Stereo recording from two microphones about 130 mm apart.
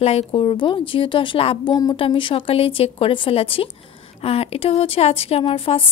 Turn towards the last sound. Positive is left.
turn(degrees=45)  # may be behind; listen again after turning